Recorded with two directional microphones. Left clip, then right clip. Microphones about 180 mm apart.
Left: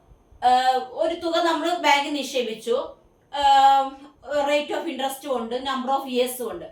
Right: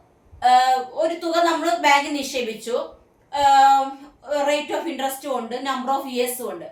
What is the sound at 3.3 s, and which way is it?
A woman's voice, 20° right (ahead or behind).